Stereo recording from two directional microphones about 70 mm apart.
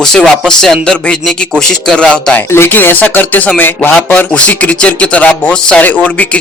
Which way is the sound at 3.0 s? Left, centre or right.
Left.